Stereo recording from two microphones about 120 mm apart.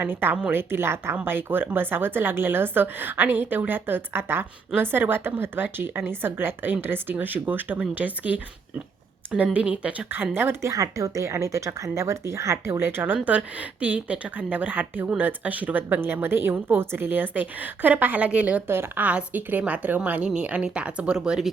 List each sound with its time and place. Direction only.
0.0 s speech: 15° right (ahead or behind)